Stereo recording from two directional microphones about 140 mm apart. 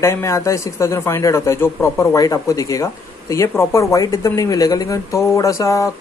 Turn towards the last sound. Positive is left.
turn(degrees=20)  # may be behind; listen again after turning